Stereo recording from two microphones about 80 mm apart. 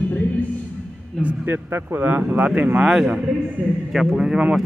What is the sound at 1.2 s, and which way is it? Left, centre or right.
A man's voice, right.